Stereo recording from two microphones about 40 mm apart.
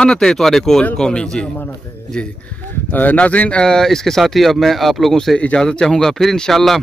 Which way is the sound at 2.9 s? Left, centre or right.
Left.